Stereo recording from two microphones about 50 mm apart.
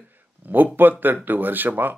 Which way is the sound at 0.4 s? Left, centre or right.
Right.